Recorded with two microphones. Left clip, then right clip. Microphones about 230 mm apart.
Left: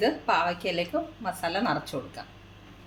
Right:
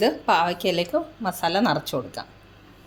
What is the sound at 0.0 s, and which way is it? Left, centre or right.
A woman's voice, right.